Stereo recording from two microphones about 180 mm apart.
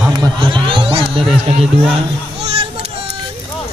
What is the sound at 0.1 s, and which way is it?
Speech, 25° right (ahead or behind).